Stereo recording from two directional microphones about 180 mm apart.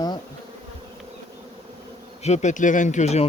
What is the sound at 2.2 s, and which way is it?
Speech, 40° left (ahead or behind).